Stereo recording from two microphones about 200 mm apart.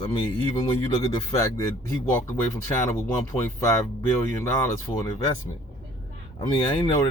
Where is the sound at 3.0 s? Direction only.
15° left (ahead or behind).